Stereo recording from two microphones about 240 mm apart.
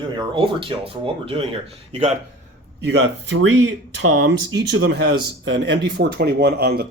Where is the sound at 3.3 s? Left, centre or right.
Right.